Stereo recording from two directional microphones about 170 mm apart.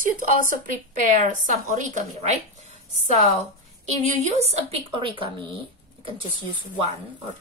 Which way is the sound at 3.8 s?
40° right (ahead or behind).